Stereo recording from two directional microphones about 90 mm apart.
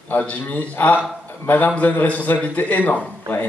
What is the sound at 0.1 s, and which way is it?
A man's voice, 20° left (ahead or behind).